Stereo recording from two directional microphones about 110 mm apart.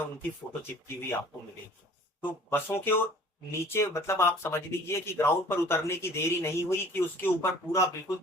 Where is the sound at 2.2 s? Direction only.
20° left (ahead or behind).